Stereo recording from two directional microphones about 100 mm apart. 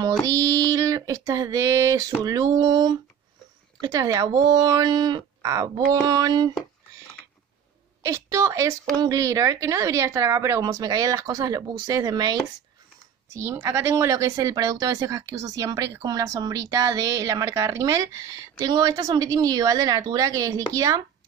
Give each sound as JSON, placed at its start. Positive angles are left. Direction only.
{"t": 0.3, "sound": "a woman's voice", "side_deg": -35}
{"t": 3.8, "sound": "a woman's voice", "side_deg": -35}
{"t": 5.4, "sound": "a woman's voice", "side_deg": -30}
{"t": 8.0, "sound": "a woman's voice", "side_deg": -30}
{"t": 13.3, "sound": "a woman's voice", "side_deg": -25}